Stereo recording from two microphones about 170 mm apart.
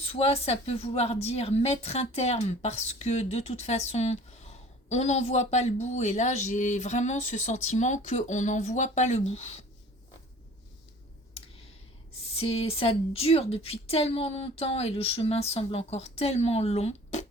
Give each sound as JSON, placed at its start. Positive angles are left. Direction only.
{"t": 0.0, "sound": "a man's voice", "side_deg": 35}
{"t": 12.3, "sound": "speech", "side_deg": 35}